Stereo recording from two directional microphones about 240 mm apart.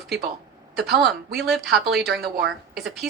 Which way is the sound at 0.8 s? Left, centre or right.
Right.